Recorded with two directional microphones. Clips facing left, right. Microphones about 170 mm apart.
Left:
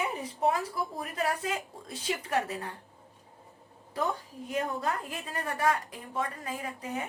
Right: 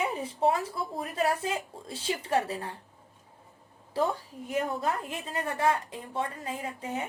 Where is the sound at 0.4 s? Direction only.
30° right (ahead or behind).